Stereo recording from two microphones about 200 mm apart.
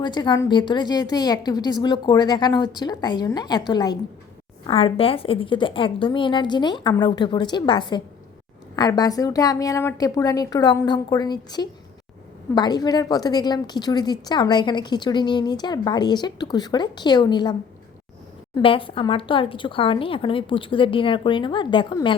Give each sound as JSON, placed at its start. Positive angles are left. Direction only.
{"t": 0.0, "sound": "a woman's voice", "side_deg": 20}
{"t": 18.5, "sound": "a woman's voice", "side_deg": 25}